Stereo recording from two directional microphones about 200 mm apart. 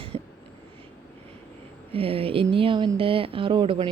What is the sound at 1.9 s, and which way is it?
Speech, 30° right (ahead or behind).